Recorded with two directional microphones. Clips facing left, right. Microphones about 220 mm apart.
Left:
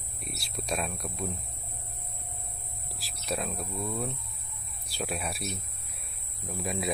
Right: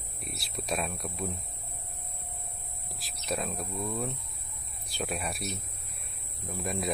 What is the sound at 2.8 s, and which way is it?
Speech, centre (ahead or behind).